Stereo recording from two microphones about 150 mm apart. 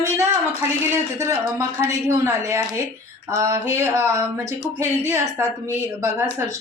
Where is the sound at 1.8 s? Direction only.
20° right (ahead or behind).